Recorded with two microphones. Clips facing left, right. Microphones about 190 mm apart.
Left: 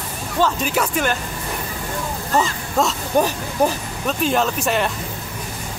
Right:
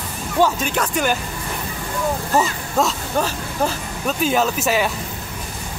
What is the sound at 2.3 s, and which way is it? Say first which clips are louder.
Speech: left 1 dB; 5° right (ahead or behind).